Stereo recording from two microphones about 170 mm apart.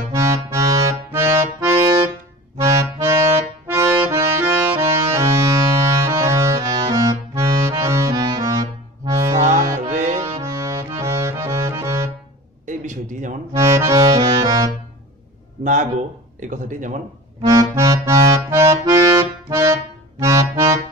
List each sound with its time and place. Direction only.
0.1 s accordion: 20° right (ahead or behind)
9.8 s music: 45° right (ahead or behind)
10.4 s accordion: 20° right (ahead or behind)
12.6 s a sound: 45° right (ahead or behind)
13.5 s accordion: 20° right (ahead or behind)
15.6 s a sound: 50° right (ahead or behind)
17.4 s accordion: 20° right (ahead or behind)